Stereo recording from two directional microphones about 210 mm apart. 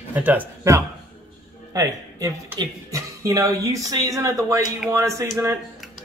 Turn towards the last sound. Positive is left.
turn(degrees=-15)  # may be behind; listen again after turning